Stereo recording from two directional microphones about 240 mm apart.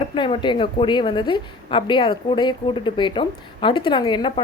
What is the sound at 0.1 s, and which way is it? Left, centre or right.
Speech, centre.